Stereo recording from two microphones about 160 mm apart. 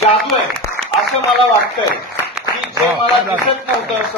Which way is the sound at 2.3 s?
5° right (ahead or behind).